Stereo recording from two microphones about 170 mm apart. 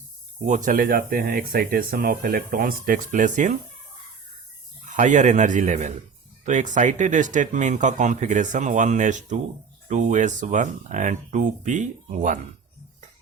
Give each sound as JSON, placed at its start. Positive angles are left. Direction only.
{"t": 0.4, "sound": "speech", "side_deg": -50}
{"t": 4.9, "sound": "speech", "side_deg": -45}